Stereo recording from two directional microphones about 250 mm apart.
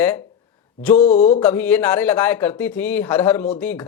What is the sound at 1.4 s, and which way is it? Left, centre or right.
Speech, centre.